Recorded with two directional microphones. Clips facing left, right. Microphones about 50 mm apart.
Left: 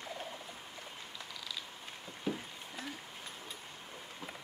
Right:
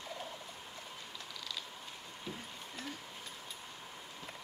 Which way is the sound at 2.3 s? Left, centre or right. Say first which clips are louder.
Left 8 dB; left.